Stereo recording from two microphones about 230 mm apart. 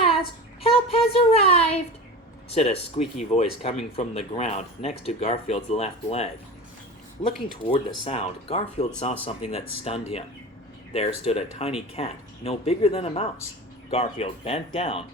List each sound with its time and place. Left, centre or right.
0.6 s a sound: left
2.5 s speech: left
7.6 s speech: left